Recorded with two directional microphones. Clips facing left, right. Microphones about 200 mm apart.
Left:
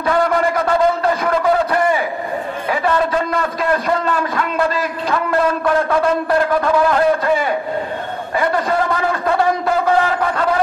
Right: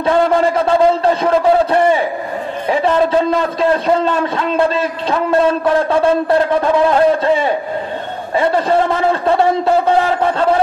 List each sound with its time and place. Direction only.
0.0 s a man's voice: 25° right (ahead or behind)